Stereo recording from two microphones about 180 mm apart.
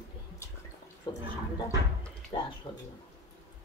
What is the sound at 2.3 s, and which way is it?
Speech, 25° left (ahead or behind).